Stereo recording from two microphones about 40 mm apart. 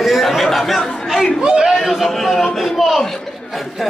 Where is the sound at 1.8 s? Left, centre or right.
Centre.